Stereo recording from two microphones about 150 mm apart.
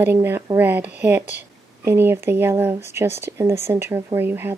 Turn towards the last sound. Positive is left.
turn(degrees=-15)  # may be behind; listen again after turning